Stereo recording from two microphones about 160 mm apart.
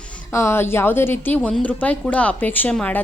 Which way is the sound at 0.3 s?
15° left (ahead or behind).